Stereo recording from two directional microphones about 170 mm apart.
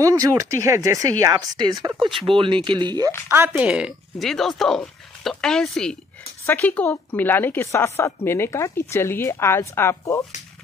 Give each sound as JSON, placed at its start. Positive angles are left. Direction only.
{"t": 0.0, "sound": "speech", "side_deg": -20}
{"t": 3.3, "sound": "a woman's voice", "side_deg": -15}